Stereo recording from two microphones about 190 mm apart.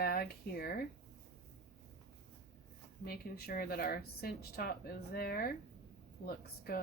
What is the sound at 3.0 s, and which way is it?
Speech, 55° left (ahead or behind).